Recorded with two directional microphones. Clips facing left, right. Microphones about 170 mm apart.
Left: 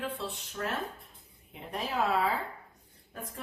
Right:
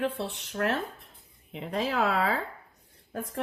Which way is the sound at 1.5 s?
90° right.